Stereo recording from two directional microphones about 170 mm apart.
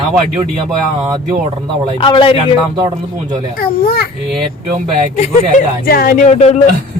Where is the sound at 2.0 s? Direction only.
30° left (ahead or behind).